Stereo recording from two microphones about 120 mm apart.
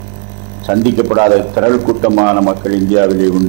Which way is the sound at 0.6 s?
20° right (ahead or behind).